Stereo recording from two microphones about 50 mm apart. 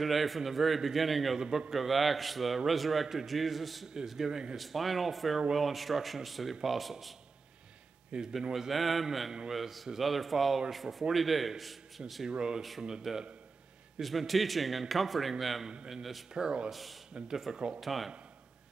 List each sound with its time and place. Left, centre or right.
0.0 s a man's voice: centre
4.6 s a man's voice: centre
8.1 s speech: centre
8.5 s a man's voice: centre
12.3 s a man's voice: centre
15.6 s a man's voice: centre
15.9 s a man's voice: centre
16.4 s speech: centre
16.7 s a man's voice: centre